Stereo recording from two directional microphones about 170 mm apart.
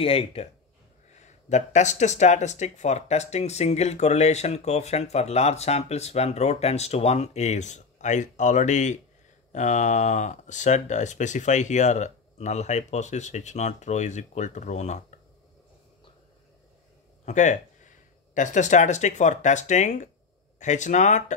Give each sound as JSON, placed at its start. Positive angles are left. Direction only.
{"t": 0.0, "sound": "speech", "side_deg": 35}
{"t": 17.2, "sound": "speech", "side_deg": 45}